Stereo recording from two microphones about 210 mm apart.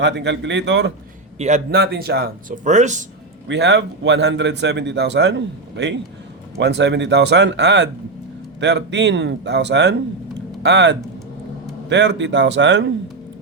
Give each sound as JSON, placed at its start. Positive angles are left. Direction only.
{"t": 0.0, "sound": "a man's voice", "side_deg": -55}
{"t": 1.4, "sound": "a man's voice", "side_deg": -35}
{"t": 1.7, "sound": "speech", "side_deg": -50}
{"t": 3.4, "sound": "a man's voice", "side_deg": -55}